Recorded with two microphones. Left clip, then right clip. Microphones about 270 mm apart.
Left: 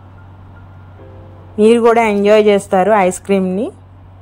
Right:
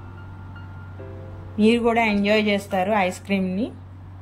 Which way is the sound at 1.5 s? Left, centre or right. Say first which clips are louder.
Left 10 dB; centre.